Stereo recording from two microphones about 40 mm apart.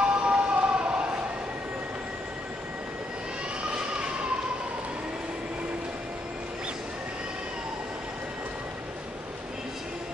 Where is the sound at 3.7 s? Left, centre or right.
Right.